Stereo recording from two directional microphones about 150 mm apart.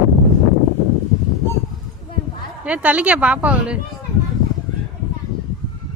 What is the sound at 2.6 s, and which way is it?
Speech, 10° right (ahead or behind).